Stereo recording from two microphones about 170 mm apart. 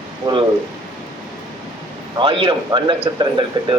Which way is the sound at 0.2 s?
25° right (ahead or behind).